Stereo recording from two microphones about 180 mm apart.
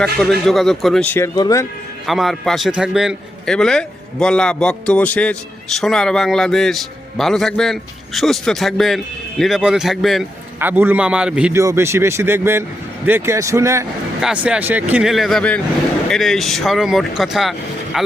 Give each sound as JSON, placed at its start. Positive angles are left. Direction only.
{"t": 0.0, "sound": "a man's voice", "side_deg": 0}
{"t": 2.0, "sound": "a man's voice", "side_deg": 0}